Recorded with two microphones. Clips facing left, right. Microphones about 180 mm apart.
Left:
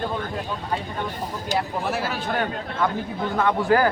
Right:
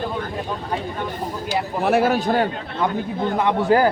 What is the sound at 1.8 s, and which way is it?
Speech, 60° right (ahead or behind).